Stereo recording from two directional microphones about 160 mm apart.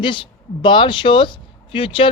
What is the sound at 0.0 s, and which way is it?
Speech, 30° left (ahead or behind).